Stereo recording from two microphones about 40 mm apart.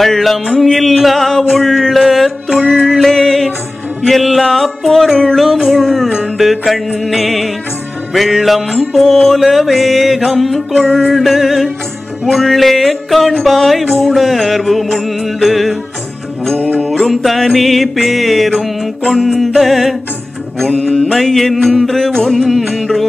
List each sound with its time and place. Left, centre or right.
0.0 s music: centre
0.9 s a sound: centre
1.5 s mantra: centre
3.1 s music: centre
5.1 s music: centre
5.4 s music: centre
10.8 s music: centre
16.5 s mantra: left
16.9 s music: centre